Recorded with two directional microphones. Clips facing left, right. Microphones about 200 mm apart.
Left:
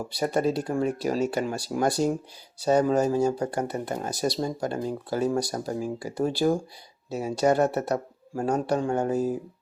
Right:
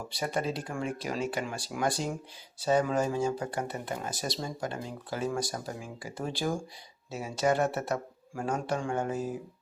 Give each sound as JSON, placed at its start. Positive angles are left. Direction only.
{"t": 0.1, "sound": "speech", "side_deg": 40}